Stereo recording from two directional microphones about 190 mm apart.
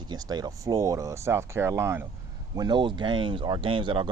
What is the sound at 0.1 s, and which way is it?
Speech, 20° right (ahead or behind).